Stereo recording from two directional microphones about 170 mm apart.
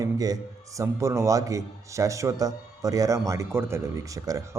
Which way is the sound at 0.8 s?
15° right (ahead or behind).